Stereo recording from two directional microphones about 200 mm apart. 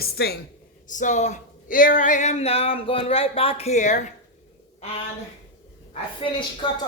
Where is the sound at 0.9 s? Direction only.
40° left (ahead or behind).